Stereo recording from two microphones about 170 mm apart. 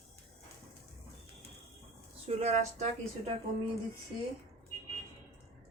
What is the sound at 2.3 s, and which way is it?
Speech, 40° right (ahead or behind).